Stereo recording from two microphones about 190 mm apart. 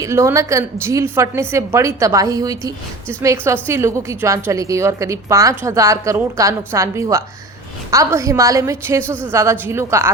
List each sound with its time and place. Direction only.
0.0 s a woman's voice: 15° right (ahead or behind)